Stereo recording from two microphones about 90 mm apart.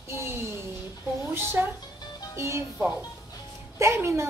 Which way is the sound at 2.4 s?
30° right (ahead or behind).